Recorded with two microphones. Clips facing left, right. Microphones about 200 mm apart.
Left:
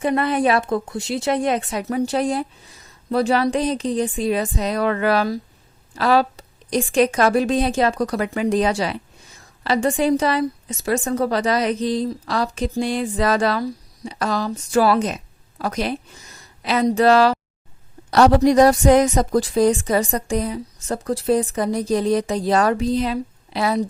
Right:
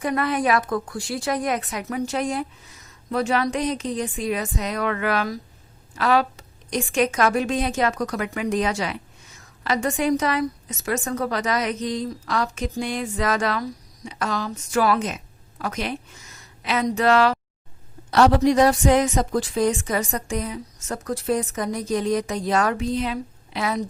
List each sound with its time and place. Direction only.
0.0 s a woman's voice: 25° left (ahead or behind)